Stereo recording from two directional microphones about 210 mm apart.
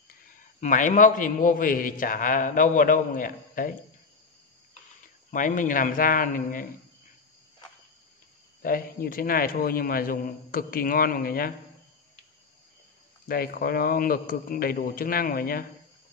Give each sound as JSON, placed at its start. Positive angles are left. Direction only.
{"t": 0.6, "sound": "a man's voice", "side_deg": 35}
{"t": 5.3, "sound": "a man's voice", "side_deg": 40}
{"t": 8.6, "sound": "a man's voice", "side_deg": 40}
{"t": 13.3, "sound": "a man's voice", "side_deg": 45}